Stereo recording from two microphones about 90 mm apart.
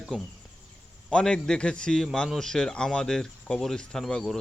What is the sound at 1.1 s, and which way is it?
A man's voice, 10° left (ahead or behind).